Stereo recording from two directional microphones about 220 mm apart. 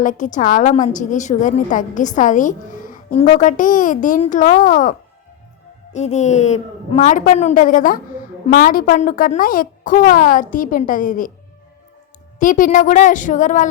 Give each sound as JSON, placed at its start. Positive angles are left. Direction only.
{"t": 0.0, "sound": "a woman's voice", "side_deg": 35}
{"t": 12.4, "sound": "a woman's voice", "side_deg": 35}